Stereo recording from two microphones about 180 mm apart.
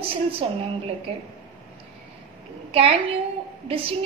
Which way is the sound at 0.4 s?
30° right (ahead or behind).